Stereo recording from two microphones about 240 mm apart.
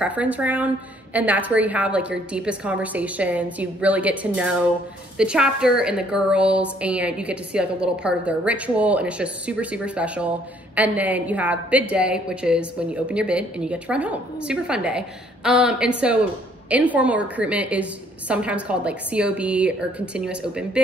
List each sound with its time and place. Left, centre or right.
0.0 s a woman's voice: centre